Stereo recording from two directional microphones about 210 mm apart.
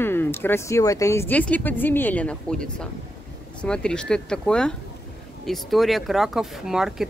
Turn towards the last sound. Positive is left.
turn(degrees=0)  # may be behind; listen again after turning